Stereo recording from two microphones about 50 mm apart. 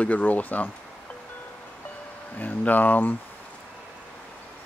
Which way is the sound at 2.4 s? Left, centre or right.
Left.